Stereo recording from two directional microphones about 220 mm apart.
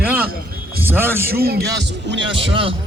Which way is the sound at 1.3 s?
45° right (ahead or behind).